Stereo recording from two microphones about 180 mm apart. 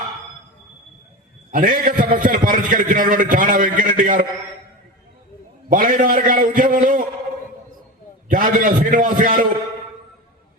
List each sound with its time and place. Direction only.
1.5 s a man's voice: 50° right (ahead or behind)
5.6 s a man's voice: 50° right (ahead or behind)
8.3 s a man's voice: 50° right (ahead or behind)